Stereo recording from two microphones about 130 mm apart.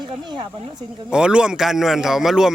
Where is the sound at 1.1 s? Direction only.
5° right (ahead or behind).